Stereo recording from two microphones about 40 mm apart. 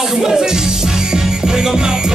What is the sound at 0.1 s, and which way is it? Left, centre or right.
Music, centre.